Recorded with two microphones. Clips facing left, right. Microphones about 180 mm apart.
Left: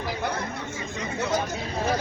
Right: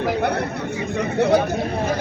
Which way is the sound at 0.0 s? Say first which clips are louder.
Right 8 dB; 65° right (ahead or behind).